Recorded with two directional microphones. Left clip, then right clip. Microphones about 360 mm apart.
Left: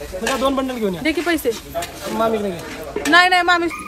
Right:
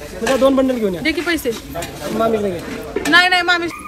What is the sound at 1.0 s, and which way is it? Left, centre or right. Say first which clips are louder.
Speech: right 1 dB; left.